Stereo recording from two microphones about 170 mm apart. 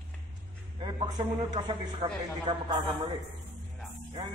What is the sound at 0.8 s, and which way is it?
A man's voice, 30° right (ahead or behind).